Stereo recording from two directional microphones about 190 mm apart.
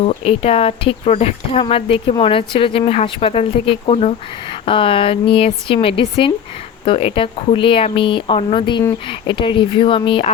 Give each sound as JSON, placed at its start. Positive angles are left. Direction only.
{"t": 0.0, "sound": "speech", "side_deg": 35}